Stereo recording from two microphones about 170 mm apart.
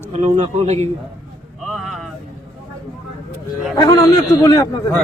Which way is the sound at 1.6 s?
Centre (ahead or behind).